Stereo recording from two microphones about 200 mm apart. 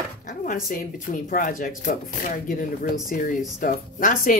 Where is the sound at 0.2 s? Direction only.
40° left (ahead or behind).